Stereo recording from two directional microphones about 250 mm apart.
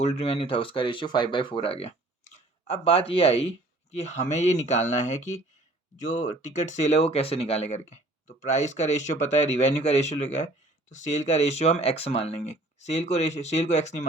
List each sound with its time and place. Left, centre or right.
0.0 s speech: left